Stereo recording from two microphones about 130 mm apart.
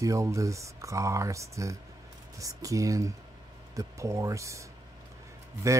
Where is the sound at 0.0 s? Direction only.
25° right (ahead or behind).